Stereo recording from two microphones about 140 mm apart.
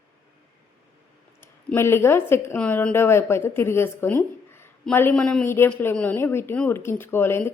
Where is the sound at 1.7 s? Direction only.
20° left (ahead or behind).